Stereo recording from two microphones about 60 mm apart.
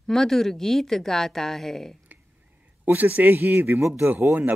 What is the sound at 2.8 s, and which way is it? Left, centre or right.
A man's voice, right.